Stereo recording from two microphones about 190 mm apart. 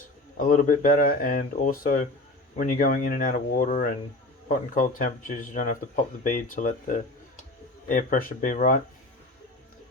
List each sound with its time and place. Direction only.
0.3 s speech: 45° left (ahead or behind)